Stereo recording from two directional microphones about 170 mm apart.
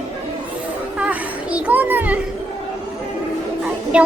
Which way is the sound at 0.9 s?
10° right (ahead or behind).